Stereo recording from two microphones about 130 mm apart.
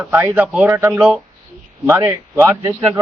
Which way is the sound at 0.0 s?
15° right (ahead or behind).